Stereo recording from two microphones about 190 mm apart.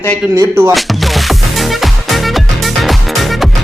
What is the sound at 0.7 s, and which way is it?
Music, centre (ahead or behind).